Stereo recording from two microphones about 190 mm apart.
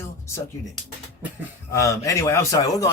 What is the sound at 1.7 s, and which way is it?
A man's voice, 15° left (ahead or behind).